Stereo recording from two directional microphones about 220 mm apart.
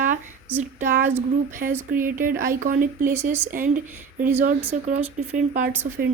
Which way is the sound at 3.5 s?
35° right (ahead or behind).